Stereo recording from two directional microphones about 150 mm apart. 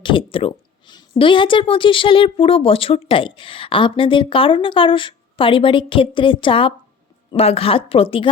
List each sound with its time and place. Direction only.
0.0 s a woman's voice: 35° left (ahead or behind)